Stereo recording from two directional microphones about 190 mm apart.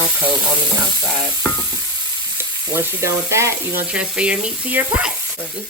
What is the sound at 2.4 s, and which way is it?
Frying, 10° right (ahead or behind).